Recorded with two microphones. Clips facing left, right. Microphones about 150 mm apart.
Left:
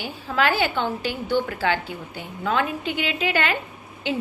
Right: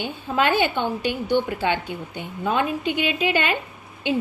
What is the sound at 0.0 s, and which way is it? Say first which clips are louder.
A woman's voice: right 1 dB; 20° right (ahead or behind).